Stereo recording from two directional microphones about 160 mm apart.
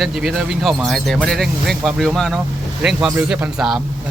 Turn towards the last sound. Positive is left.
turn(degrees=0)  # may be behind; listen again after turning